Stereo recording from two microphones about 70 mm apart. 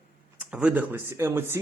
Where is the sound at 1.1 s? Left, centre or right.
Right.